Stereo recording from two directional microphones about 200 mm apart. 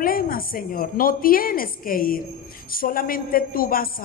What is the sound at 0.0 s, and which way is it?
A woman's voice, 45° left (ahead or behind).